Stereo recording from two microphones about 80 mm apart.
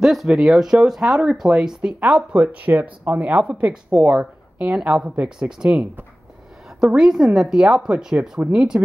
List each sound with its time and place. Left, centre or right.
0.0 s speech: centre